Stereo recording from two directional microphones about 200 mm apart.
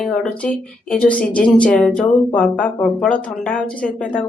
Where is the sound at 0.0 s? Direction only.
5° left (ahead or behind).